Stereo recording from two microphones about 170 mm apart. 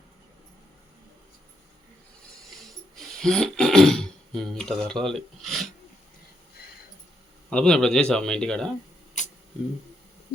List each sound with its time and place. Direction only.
3.0 s speech: centre (ahead or behind)
7.5 s speech: 5° left (ahead or behind)
9.2 s camera: 45° left (ahead or behind)